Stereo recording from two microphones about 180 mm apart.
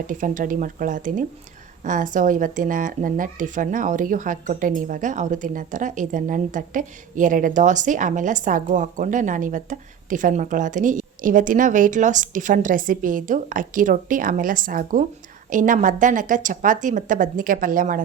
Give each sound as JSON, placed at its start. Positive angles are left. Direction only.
{"t": 0.1, "sound": "speech", "side_deg": -45}